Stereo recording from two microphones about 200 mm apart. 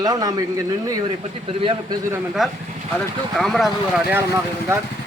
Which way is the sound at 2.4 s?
Centre (ahead or behind).